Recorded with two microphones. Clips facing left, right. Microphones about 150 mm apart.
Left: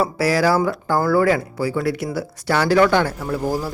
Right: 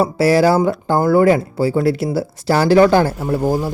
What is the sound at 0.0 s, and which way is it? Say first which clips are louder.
Speech: right 5 dB; 25° right (ahead or behind).